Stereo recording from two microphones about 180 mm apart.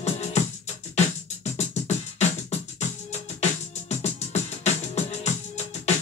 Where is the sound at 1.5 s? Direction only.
40° left (ahead or behind).